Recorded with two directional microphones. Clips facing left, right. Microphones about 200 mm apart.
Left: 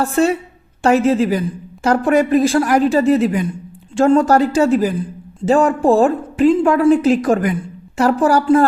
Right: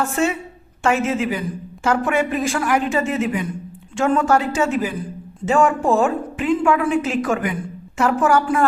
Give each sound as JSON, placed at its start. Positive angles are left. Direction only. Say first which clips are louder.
{"t": 0.0, "sound": "a woman's voice", "louder": "left 5 dB", "side_deg": 35}